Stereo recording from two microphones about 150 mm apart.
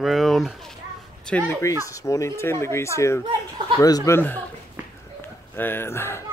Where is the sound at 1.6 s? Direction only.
20° left (ahead or behind).